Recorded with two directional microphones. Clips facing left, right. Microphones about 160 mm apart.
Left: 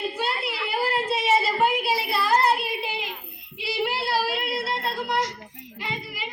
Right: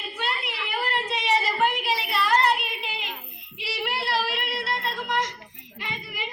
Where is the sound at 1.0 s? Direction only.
5° left (ahead or behind).